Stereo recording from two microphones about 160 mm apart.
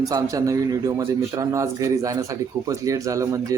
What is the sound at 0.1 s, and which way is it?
A man's voice, 20° right (ahead or behind).